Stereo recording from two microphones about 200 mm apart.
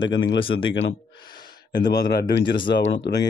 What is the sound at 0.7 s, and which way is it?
Speech, 65° left (ahead or behind).